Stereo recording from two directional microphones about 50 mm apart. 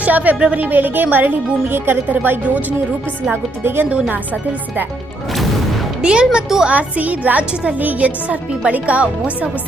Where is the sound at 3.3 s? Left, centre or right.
Right.